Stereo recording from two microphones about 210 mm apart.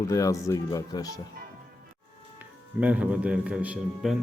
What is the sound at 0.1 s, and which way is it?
Speech, 15° left (ahead or behind).